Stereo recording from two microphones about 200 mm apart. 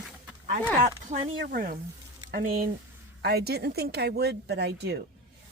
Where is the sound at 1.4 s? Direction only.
45° right (ahead or behind).